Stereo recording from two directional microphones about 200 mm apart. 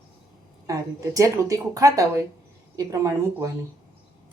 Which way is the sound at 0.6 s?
15° right (ahead or behind).